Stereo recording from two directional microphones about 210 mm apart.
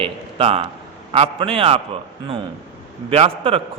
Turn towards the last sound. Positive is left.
turn(degrees=-25)  # may be behind; listen again after turning